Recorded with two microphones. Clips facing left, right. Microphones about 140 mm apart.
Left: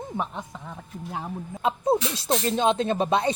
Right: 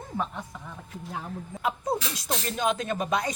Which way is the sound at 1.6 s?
25° left (ahead or behind).